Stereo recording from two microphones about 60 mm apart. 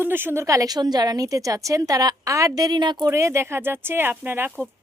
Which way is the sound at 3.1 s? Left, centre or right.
Right.